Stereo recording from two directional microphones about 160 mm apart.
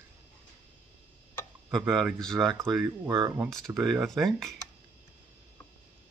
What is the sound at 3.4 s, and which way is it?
Speech, centre (ahead or behind).